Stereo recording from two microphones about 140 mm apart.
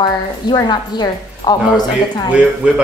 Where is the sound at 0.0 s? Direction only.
30° left (ahead or behind).